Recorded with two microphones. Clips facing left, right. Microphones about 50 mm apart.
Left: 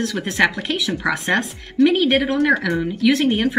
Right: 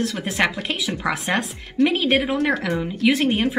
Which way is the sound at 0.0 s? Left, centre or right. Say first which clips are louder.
Left 3 dB; centre.